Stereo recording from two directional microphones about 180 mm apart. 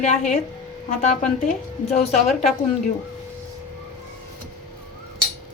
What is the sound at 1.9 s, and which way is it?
Speech, 35° left (ahead or behind).